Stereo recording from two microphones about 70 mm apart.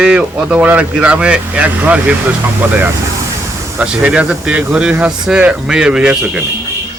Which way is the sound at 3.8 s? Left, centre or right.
Centre.